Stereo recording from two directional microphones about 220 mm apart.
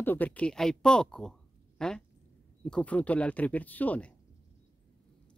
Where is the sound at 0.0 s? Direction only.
10° left (ahead or behind).